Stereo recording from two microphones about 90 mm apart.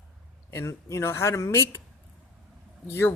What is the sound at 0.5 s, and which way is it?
Speech, 30° left (ahead or behind).